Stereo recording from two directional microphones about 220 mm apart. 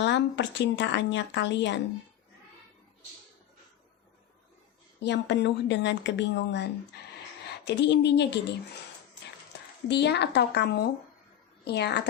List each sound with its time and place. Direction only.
0.0 s speech: 55° left (ahead or behind)
4.9 s speech: 50° left (ahead or behind)
9.9 s speech: 50° left (ahead or behind)